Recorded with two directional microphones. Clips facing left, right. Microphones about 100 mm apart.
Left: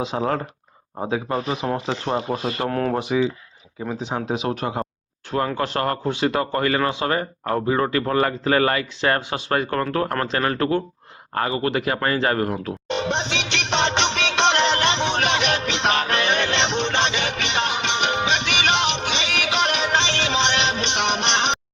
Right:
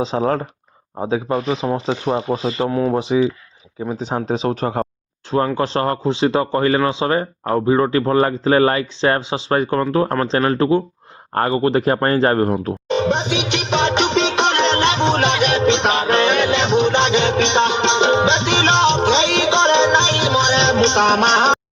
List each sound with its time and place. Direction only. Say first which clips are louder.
0.0 s speech: right 5 dB; 35° right (ahead or behind)
1.3 s speech: right 4 dB; 10° right (ahead or behind)
3.9 s speech: right 4 dB; 35° right (ahead or behind)
11.3 s speech: right 6 dB; 40° right (ahead or behind)
13.1 s music: right 6 dB; 10° right (ahead or behind)
14.1 s music: right 4 dB; 20° right (ahead or behind)
15.0 s music: right 5 dB; 30° right (ahead or behind)